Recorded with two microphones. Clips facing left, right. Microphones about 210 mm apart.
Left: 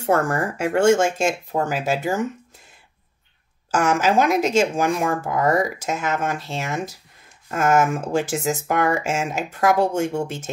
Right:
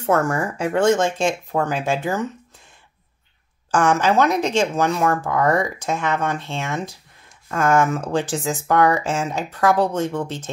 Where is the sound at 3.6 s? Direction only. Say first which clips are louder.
Right 1 dB; 5° left (ahead or behind).